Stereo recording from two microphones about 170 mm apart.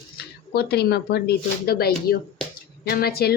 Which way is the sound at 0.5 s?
70° left (ahead or behind).